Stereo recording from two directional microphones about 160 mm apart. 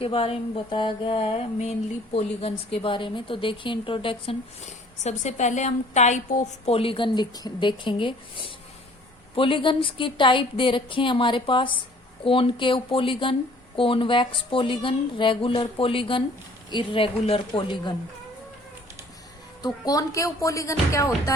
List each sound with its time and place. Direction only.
0.0 s a woman's voice: 35° left (ahead or behind)
19.6 s speech: 25° left (ahead or behind)